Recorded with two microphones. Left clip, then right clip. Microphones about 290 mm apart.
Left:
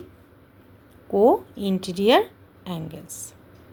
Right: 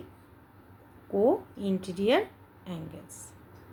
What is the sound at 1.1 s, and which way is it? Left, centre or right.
A woman's voice, left.